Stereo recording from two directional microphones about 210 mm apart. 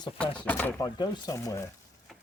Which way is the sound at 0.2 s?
5° left (ahead or behind).